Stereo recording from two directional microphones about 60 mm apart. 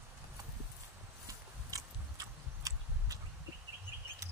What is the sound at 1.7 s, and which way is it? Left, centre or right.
Horse, right.